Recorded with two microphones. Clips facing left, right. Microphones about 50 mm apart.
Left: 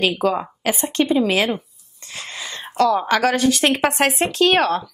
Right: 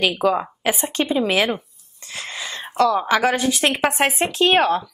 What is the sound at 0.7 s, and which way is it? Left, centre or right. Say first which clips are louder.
Speech: left 3 dB; centre.